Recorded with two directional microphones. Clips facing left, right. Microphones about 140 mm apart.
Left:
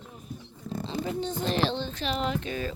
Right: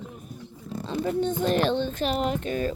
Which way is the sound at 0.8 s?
50° right (ahead or behind).